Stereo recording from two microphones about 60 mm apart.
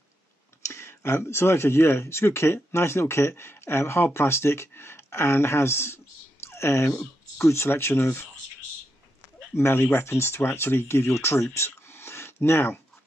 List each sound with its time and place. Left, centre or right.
0.7 s speech: left
6.4 s clicking: left
7.3 s speech: left
9.6 s speech: left